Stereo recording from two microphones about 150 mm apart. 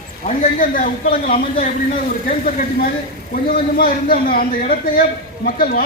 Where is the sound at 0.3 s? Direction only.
65° left (ahead or behind).